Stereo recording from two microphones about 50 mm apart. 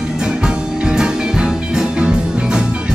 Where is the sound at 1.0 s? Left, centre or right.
Centre.